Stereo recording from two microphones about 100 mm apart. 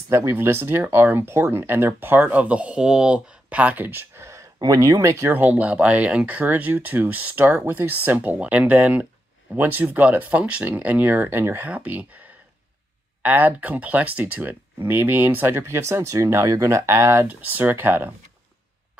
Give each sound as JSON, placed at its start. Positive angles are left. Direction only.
{"t": 0.1, "sound": "speech", "side_deg": -25}
{"t": 5.3, "sound": "speech", "side_deg": -15}